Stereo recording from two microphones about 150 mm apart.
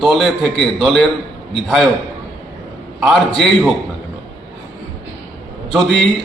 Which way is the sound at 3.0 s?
Centre (ahead or behind).